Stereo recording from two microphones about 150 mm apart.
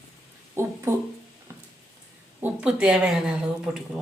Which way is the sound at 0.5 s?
15° right (ahead or behind).